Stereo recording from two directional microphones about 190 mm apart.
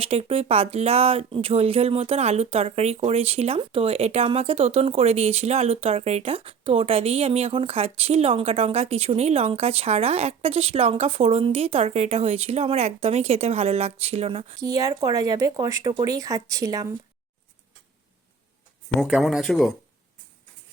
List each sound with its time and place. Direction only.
0.0 s speech: 30° right (ahead or behind)
14.6 s speech: 20° right (ahead or behind)
18.9 s speech: centre (ahead or behind)